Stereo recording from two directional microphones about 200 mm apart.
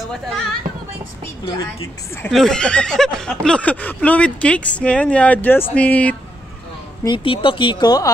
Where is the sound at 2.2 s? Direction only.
5° left (ahead or behind).